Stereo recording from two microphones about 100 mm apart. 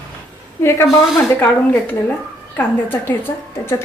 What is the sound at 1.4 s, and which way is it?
A woman's voice, 15° left (ahead or behind).